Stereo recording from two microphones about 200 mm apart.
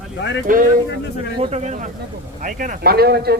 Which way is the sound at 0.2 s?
65° left (ahead or behind).